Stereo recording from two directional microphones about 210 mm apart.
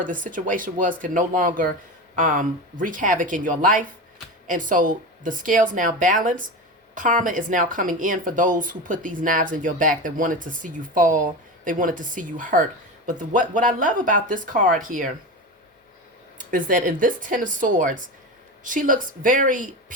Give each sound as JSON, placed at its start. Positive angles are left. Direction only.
{"t": 0.0, "sound": "speech", "side_deg": -40}
{"t": 16.4, "sound": "speech", "side_deg": -40}